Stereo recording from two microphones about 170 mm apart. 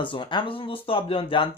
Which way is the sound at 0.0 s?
30° left (ahead or behind).